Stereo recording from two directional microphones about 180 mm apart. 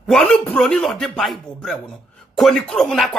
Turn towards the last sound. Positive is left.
turn(degrees=0)  # may be behind; listen again after turning